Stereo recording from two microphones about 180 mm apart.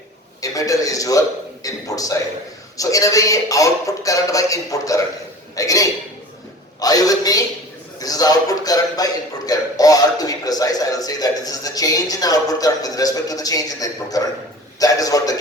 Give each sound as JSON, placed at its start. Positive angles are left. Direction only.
{"t": 0.4, "sound": "a man's voice", "side_deg": 20}